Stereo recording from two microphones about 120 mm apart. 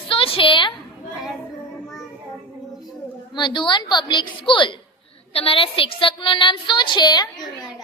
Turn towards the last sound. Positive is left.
turn(degrees=35)  # may be behind; listen again after turning